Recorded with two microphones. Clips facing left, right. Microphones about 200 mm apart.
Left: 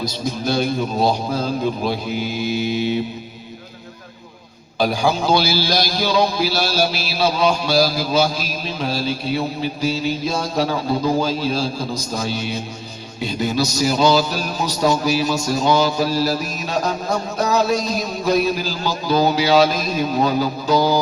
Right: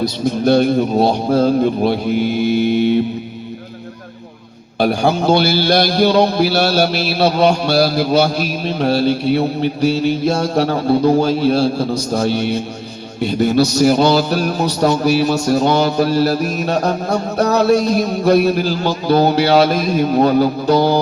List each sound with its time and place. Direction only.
0.0 s a man's voice: 65° right (ahead or behind)
4.8 s a man's voice: 60° right (ahead or behind)